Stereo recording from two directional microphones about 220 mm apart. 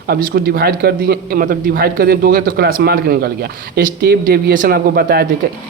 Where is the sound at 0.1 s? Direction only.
45° right (ahead or behind).